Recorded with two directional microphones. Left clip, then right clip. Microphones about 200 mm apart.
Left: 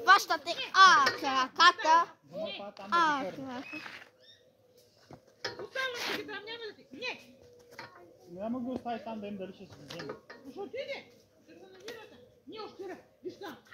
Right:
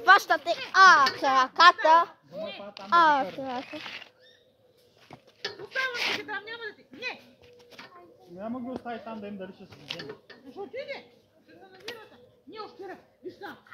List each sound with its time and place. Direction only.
0.0 s a child's voice: 25° left (ahead or behind)
2.3 s speech: centre (ahead or behind)
2.9 s a child's voice: 15° left (ahead or behind)
3.6 s speech: 25° right (ahead or behind)
5.7 s speech: 25° right (ahead or behind)
6.2 s speech: centre (ahead or behind)
8.4 s a child's voice: 5° left (ahead or behind)
9.9 s speech: 25° right (ahead or behind)
10.5 s speech: centre (ahead or behind)
11.9 s mechanisms: 30° right (ahead or behind)
12.4 s speech: centre (ahead or behind)